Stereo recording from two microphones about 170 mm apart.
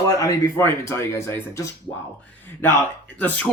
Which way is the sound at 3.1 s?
10° left (ahead or behind).